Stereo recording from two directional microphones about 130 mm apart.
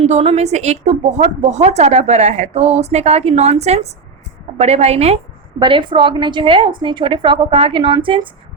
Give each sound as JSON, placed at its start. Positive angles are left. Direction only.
{"t": 0.0, "sound": "speech", "side_deg": -55}
{"t": 5.5, "sound": "a woman's voice", "side_deg": -40}